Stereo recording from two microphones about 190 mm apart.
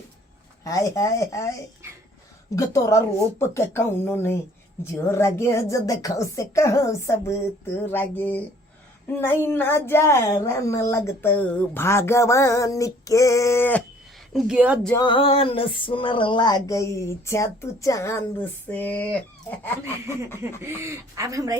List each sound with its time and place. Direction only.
0.6 s speech: 15° left (ahead or behind)
2.6 s speech: 15° left (ahead or behind)
14.3 s speech: 5° right (ahead or behind)
14.9 s a sound: 25° left (ahead or behind)
17.2 s speech: 15° left (ahead or behind)
19.8 s speech: 15° right (ahead or behind)